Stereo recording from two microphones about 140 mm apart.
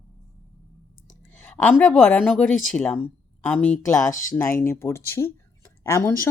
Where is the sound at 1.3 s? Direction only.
10° left (ahead or behind).